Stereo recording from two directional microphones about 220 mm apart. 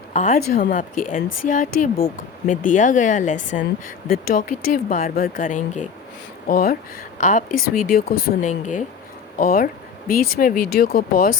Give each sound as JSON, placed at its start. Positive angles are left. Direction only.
{"t": 0.1, "sound": "speech", "side_deg": 35}